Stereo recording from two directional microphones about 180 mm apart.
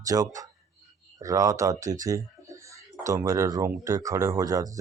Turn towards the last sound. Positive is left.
turn(degrees=-20)  # may be behind; listen again after turning